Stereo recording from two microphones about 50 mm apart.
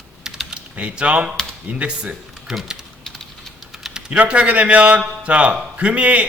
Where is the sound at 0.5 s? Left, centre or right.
Right.